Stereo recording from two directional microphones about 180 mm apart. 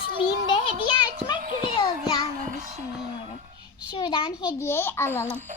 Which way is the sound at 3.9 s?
25° left (ahead or behind).